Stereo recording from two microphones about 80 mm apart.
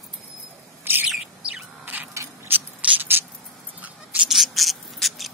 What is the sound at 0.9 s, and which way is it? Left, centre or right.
Bird, right.